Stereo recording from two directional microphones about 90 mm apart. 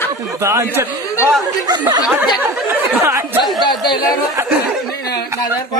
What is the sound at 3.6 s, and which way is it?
Speech, 55° left (ahead or behind).